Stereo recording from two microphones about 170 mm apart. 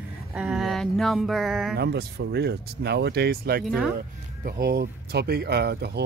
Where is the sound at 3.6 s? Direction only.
Centre (ahead or behind).